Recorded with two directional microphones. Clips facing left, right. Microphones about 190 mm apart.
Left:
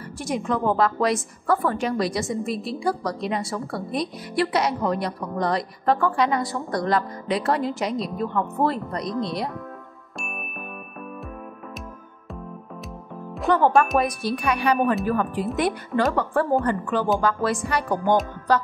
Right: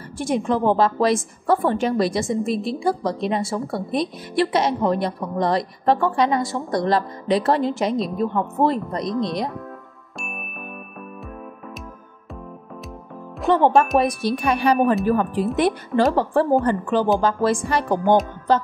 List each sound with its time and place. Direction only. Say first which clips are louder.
0.2 s a woman's voice: right 4 dB; 30° right (ahead or behind)
13.7 s speech: right 1 dB; centre (ahead or behind)
14.4 s a woman's voice: right 3 dB; 30° right (ahead or behind)